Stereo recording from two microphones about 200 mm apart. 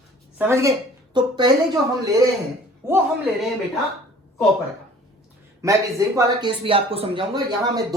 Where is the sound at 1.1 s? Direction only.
20° right (ahead or behind).